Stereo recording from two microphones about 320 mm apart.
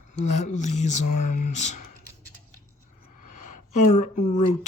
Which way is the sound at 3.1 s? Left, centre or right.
Left.